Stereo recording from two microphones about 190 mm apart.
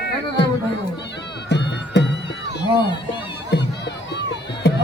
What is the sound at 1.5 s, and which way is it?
Music, 65° left (ahead or behind).